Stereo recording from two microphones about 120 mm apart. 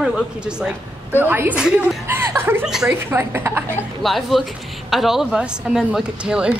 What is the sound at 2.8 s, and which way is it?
Speech, 20° right (ahead or behind).